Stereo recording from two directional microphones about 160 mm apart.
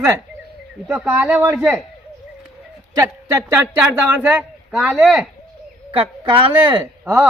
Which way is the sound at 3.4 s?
15° right (ahead or behind).